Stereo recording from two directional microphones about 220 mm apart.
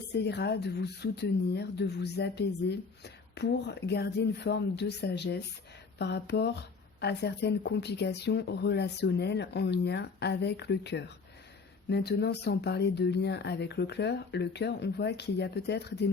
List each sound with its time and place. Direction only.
0.2 s speech: 50° left (ahead or behind)